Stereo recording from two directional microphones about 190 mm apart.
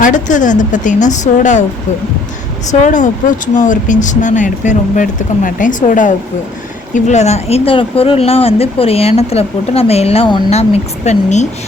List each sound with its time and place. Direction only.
0.0 s speech: 40° left (ahead or behind)
2.8 s speech: 40° left (ahead or behind)